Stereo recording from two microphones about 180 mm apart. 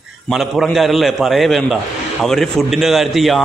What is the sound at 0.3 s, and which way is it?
A man's voice, centre (ahead or behind).